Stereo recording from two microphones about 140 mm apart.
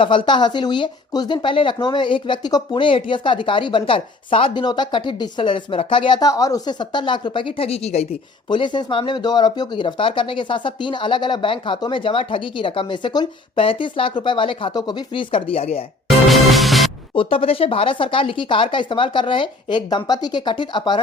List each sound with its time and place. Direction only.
0.0 s speech: 35° left (ahead or behind)
8.4 s speech: 35° left (ahead or behind)
16.0 s music: centre (ahead or behind)
17.2 s speech: 40° left (ahead or behind)